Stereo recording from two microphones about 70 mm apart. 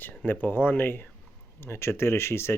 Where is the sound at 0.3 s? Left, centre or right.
Left.